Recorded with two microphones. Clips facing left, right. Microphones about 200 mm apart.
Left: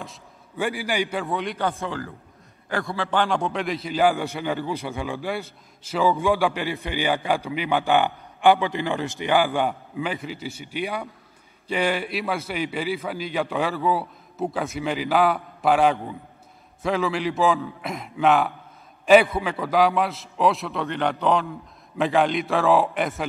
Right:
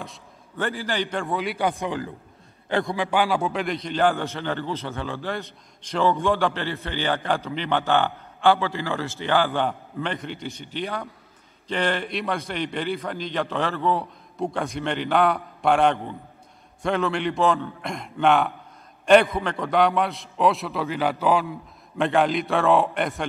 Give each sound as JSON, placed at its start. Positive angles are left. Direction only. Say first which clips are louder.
{"t": 0.0, "sound": "a sound", "louder": "even", "side_deg": 0}
{"t": 0.7, "sound": "a man's voice", "louder": "left 1 dB", "side_deg": 10}
{"t": 1.7, "sound": "a man's voice", "louder": "right 2 dB", "side_deg": -15}